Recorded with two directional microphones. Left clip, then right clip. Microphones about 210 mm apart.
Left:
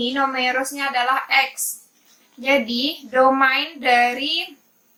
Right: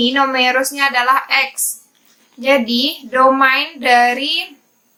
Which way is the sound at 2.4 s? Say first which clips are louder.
Right 5 dB; 25° right (ahead or behind).